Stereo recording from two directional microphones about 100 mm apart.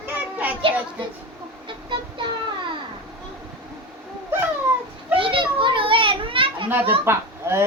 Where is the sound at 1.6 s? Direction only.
55° right (ahead or behind).